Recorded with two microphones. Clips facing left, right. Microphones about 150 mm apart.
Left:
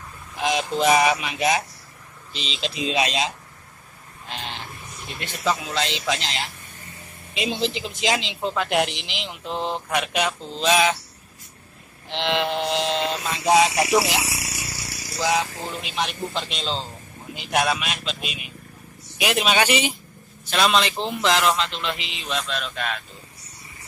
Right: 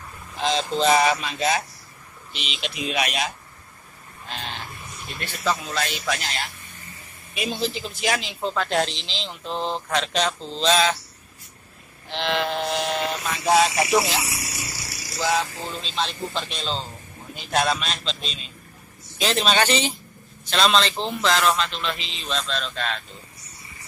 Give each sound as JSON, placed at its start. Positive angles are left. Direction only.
{"t": 0.4, "sound": "speech", "side_deg": 15}
{"t": 2.4, "sound": "speech", "side_deg": 30}
{"t": 4.3, "sound": "a sound", "side_deg": 20}
{"t": 5.2, "sound": "speech", "side_deg": 15}
{"t": 12.1, "sound": "speech", "side_deg": 20}
{"t": 15.1, "sound": "speech", "side_deg": 20}